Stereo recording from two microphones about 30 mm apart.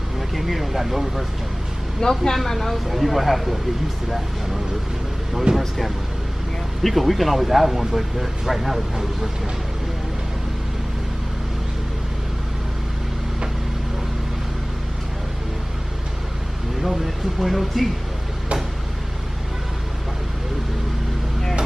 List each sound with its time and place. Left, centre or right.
0.3 s speech: centre
2.0 s speech: centre
2.9 s speech: centre
5.5 s speech: right
6.8 s speech: centre
16.8 s speech: centre